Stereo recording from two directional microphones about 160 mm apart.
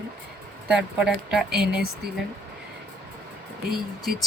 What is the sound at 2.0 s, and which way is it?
Speech, 85° right.